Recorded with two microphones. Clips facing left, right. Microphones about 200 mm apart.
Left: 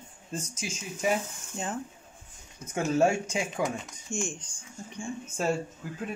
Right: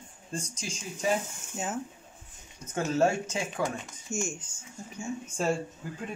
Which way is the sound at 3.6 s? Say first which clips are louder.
Left 1 dB; 5° right (ahead or behind).